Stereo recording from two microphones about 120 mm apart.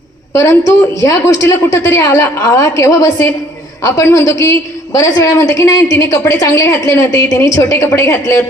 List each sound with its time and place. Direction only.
0.3 s a woman's voice: 20° left (ahead or behind)